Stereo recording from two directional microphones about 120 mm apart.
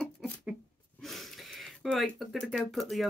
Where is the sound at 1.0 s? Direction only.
Centre (ahead or behind).